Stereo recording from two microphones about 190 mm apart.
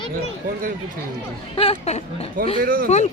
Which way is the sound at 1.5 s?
30° left (ahead or behind).